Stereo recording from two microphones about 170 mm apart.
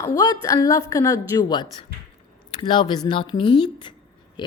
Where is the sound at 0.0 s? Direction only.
20° left (ahead or behind).